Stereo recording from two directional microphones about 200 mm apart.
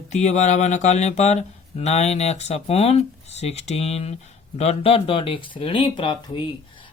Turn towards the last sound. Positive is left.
turn(degrees=25)  # may be behind; listen again after turning